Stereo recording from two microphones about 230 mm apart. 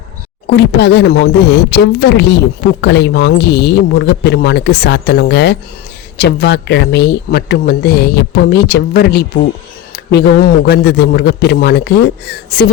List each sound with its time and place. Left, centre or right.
0.4 s speech: left